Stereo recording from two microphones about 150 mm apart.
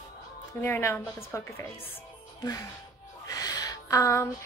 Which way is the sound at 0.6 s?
15° left (ahead or behind).